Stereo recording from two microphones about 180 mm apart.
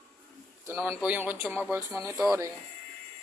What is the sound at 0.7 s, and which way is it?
Speech, 10° right (ahead or behind).